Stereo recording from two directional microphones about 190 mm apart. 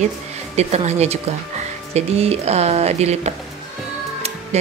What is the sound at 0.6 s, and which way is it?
Speech, 35° right (ahead or behind).